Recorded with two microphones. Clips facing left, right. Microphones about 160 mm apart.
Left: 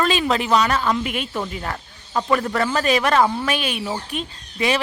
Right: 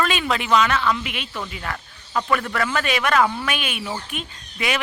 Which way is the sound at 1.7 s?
25° left (ahead or behind).